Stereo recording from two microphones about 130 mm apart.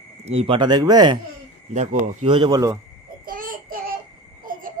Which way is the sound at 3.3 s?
90° right.